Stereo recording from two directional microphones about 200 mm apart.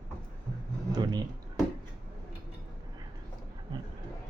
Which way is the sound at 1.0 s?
20° right (ahead or behind).